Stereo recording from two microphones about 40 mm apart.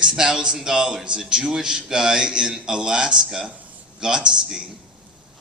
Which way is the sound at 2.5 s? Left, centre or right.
Centre.